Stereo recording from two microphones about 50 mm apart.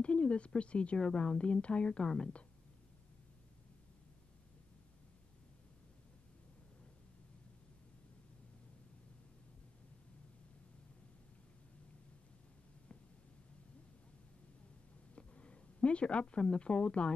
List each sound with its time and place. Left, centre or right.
0.0 s a sound: left
0.6 s a woman's voice: left
15.1 s speech: left